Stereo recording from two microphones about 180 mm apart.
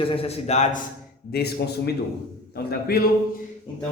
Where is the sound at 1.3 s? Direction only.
65° left (ahead or behind).